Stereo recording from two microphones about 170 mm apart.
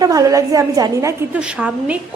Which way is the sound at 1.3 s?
10° right (ahead or behind).